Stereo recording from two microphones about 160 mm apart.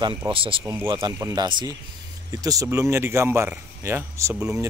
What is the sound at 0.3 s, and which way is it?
Speech, 35° right (ahead or behind).